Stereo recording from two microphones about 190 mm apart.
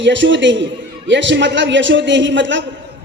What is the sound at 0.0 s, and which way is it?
A man's voice, 75° right (ahead or behind).